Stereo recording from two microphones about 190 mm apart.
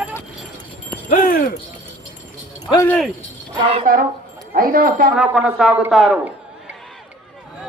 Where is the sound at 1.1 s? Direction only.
45° left (ahead or behind).